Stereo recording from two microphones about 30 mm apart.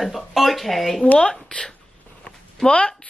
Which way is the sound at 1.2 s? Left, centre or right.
Left.